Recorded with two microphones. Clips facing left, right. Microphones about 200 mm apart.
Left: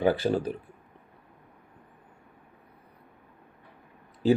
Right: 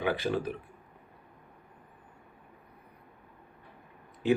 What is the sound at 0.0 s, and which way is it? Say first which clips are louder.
Speech: left 5 dB; 35° left (ahead or behind).